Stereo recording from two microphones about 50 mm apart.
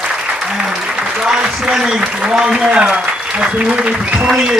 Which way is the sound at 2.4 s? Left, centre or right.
Right.